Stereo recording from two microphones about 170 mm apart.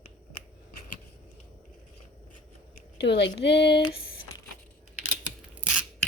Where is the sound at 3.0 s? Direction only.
90° left.